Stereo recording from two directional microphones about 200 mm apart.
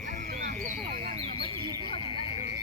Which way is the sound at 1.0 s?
30° right (ahead or behind).